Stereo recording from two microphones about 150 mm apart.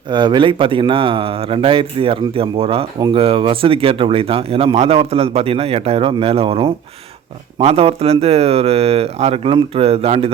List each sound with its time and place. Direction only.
0.1 s speech: 30° right (ahead or behind)